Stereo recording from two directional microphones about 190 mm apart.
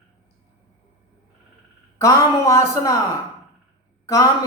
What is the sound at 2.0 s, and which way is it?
Speech, 15° left (ahead or behind).